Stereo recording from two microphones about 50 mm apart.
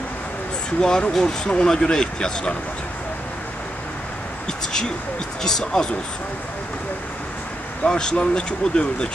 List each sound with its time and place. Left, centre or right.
0.7 s speech: centre
5.4 s speech: centre
7.8 s speech: centre